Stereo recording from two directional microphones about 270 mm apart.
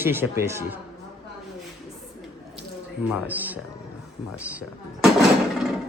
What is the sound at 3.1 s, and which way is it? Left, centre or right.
Speech, centre.